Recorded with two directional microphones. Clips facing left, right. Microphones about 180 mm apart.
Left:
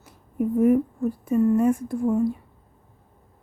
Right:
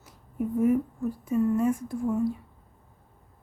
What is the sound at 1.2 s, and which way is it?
Speech, 55° left (ahead or behind).